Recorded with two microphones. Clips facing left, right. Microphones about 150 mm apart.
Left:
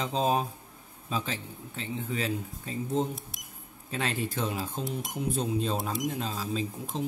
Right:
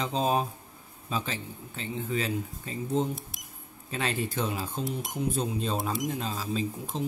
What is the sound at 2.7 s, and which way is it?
Speech, centre (ahead or behind).